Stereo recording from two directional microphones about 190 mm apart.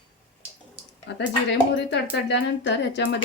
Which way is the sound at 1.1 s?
65° left (ahead or behind).